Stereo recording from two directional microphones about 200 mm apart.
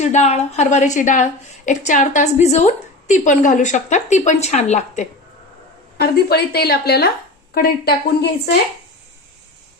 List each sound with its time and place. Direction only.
0.0 s a woman's voice: 35° left (ahead or behind)
6.0 s a woman's voice: 50° left (ahead or behind)